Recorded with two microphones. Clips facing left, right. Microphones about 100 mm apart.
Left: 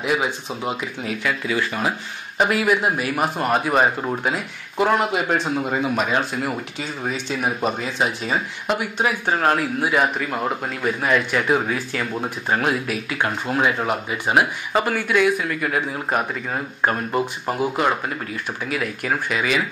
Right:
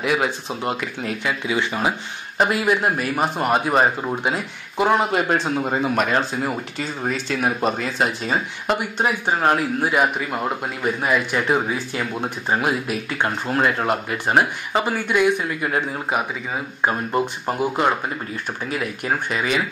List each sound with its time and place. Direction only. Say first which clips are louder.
0.0 s speech: right 1 dB; centre (ahead or behind)
19.2 s speech: left 1 dB; 35° right (ahead or behind)